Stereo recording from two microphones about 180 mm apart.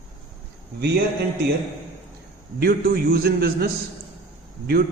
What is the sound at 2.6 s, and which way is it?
A man's voice, 60° right (ahead or behind).